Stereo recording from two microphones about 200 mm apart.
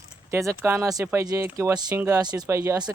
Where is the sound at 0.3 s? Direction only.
15° right (ahead or behind).